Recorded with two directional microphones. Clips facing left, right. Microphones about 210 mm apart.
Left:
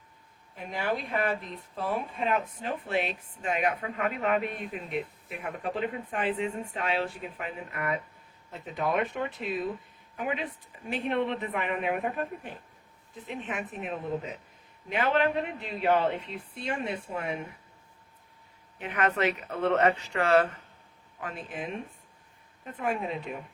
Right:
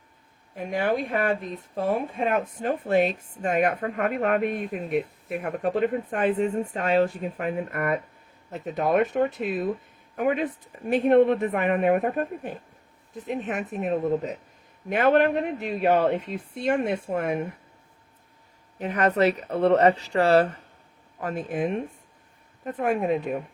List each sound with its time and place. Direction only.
0.5 s a woman's voice: 45° right (ahead or behind)
18.8 s a woman's voice: 40° right (ahead or behind)